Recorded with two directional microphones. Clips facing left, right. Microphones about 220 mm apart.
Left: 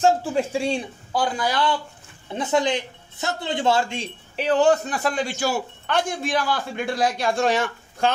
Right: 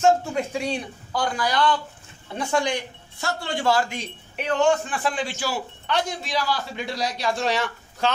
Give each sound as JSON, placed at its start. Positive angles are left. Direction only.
{"t": 0.0, "sound": "speech", "side_deg": 30}